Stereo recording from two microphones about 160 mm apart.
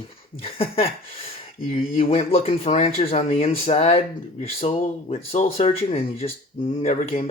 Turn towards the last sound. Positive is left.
turn(degrees=40)  # may be behind; listen again after turning